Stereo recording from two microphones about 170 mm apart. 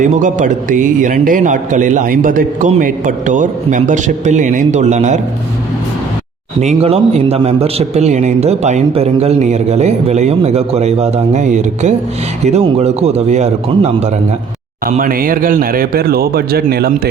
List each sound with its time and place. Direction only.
0.0 s a man's voice: 50° right (ahead or behind)
6.6 s a man's voice: 40° right (ahead or behind)
14.8 s speech: 55° right (ahead or behind)